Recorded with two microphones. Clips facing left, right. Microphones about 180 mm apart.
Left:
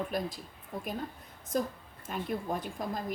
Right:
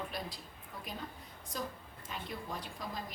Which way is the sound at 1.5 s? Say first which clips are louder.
Left 9 dB; 50° left (ahead or behind).